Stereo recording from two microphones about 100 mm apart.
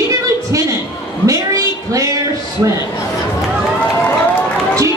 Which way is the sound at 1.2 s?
35° right (ahead or behind).